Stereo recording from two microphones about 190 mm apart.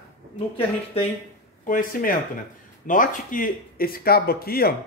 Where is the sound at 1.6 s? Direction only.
45° left (ahead or behind).